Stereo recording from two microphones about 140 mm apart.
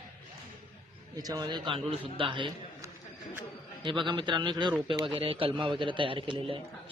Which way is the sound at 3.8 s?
35° right (ahead or behind).